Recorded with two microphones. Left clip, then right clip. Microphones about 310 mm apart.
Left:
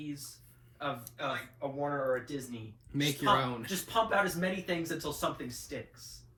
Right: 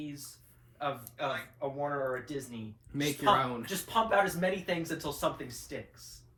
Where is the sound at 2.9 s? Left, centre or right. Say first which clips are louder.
Right 1 dB; centre.